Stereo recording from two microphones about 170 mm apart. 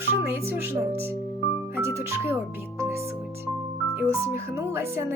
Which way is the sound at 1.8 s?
15° right (ahead or behind).